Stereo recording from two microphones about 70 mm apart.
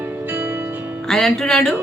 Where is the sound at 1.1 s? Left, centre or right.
Centre.